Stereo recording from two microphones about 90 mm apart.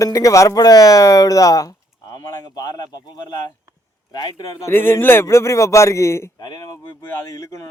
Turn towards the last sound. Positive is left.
turn(degrees=25)  # may be behind; listen again after turning